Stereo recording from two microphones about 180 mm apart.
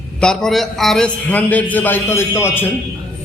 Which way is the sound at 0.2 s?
5° left (ahead or behind).